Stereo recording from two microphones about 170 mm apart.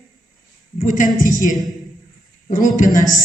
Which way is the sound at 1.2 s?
50° left (ahead or behind).